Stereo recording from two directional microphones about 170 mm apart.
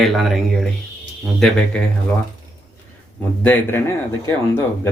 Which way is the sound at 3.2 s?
10° left (ahead or behind).